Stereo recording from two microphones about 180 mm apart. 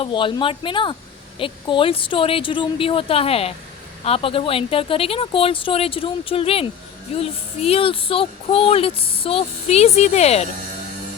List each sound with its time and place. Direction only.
0.0 s speech: 30° left (ahead or behind)